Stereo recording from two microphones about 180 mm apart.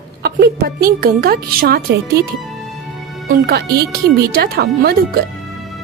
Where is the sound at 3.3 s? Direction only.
60° right (ahead or behind).